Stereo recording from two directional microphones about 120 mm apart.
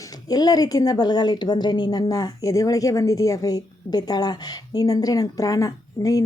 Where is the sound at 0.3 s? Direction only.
30° left (ahead or behind).